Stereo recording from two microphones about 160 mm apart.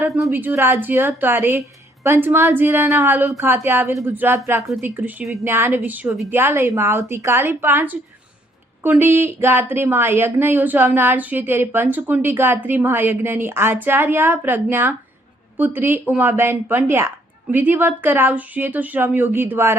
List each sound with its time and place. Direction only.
0.0 s a woman's voice: 15° right (ahead or behind)